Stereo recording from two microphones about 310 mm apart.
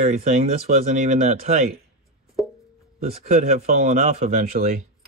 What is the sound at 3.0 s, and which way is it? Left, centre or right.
Speech, right.